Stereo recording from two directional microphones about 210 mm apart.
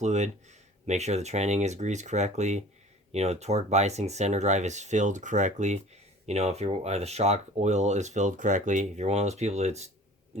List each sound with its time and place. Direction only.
0.0 s speech: 35° right (ahead or behind)